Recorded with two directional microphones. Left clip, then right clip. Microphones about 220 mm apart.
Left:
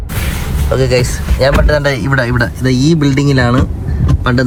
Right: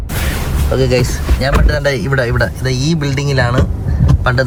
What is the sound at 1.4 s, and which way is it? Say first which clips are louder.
Speech: left 5 dB; 10° left (ahead or behind).